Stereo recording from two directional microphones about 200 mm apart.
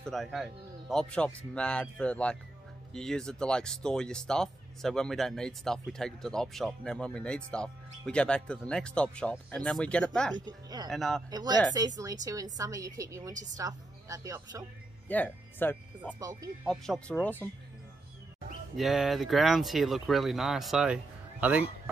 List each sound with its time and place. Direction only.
0.0 s speech: centre (ahead or behind)
10.4 s speech: 20° right (ahead or behind)
10.9 s speech: centre (ahead or behind)
11.2 s speech: 20° right (ahead or behind)
15.0 s speech: 10° left (ahead or behind)
16.2 s speech: 15° right (ahead or behind)
16.6 s speech: centre (ahead or behind)
18.8 s speech: centre (ahead or behind)